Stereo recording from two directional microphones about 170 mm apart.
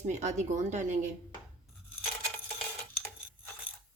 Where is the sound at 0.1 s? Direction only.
45° right (ahead or behind).